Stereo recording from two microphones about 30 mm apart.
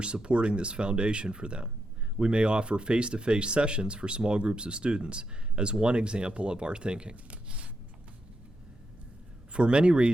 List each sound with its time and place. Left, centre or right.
0.0 s speech: right
7.3 s a sound: right
9.5 s speech: right